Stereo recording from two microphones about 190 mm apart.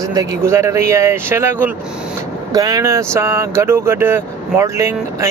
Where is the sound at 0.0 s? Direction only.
20° right (ahead or behind).